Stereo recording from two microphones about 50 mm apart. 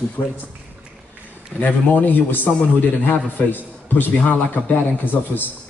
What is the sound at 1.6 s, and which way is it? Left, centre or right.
A man's voice, left.